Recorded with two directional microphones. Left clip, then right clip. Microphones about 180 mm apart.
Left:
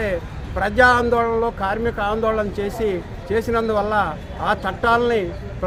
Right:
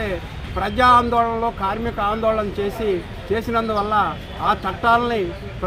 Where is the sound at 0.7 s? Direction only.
25° left (ahead or behind).